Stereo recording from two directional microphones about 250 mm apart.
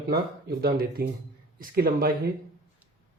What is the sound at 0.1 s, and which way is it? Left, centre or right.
Speech, right.